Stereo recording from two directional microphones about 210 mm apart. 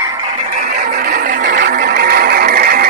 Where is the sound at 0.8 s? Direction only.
45° right (ahead or behind).